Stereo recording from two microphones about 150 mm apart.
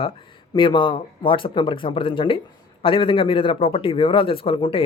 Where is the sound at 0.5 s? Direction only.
30° left (ahead or behind).